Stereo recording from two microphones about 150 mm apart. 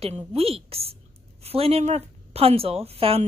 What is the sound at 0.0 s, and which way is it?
A woman's voice, 40° right (ahead or behind).